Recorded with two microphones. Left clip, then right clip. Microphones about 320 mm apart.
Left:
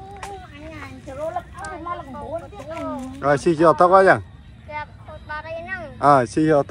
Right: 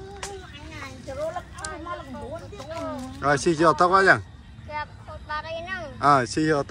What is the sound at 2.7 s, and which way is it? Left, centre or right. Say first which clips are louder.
Speech: left 3 dB; centre.